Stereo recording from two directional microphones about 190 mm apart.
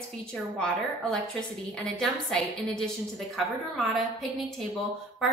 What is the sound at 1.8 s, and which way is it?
A woman's voice, 5° left (ahead or behind).